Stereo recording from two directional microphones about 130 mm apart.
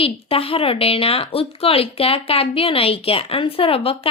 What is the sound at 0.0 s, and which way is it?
Speech, 45° left (ahead or behind).